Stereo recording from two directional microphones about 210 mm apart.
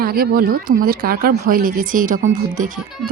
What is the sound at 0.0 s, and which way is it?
A woman's voice, 45° right (ahead or behind).